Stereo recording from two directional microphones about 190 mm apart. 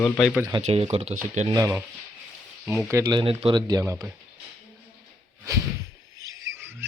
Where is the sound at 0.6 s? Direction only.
35° right (ahead or behind).